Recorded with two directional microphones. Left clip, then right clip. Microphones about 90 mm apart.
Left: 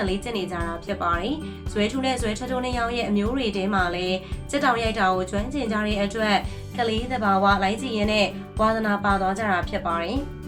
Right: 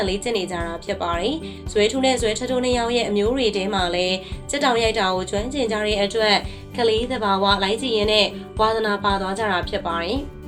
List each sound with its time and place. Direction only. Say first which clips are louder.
0.0 s speech: right 4 dB; 40° right (ahead or behind)